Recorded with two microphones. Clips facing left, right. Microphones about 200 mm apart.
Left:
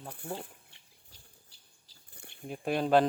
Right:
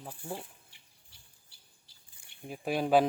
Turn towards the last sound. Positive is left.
turn(degrees=-10)  # may be behind; listen again after turning